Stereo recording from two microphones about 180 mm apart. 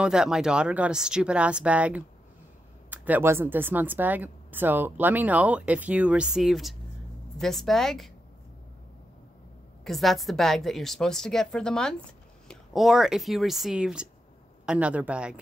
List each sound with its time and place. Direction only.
0.0 s a woman's voice: 5° right (ahead or behind)
9.8 s a woman's voice: centre (ahead or behind)